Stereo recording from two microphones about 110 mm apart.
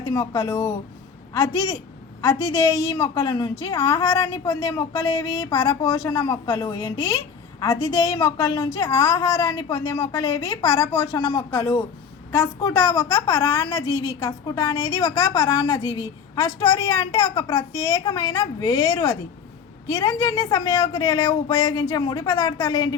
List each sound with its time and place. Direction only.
0.0 s a woman's voice: 30° left (ahead or behind)
5.1 s speech: 45° left (ahead or behind)
5.9 s a woman's voice: 30° left (ahead or behind)